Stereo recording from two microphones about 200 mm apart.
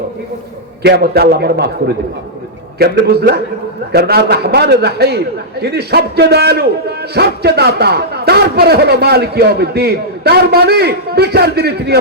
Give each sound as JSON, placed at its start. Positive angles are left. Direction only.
{"t": 0.8, "sound": "a man's voice", "side_deg": -50}